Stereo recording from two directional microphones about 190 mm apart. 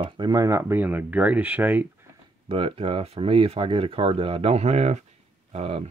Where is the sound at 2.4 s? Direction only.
30° right (ahead or behind).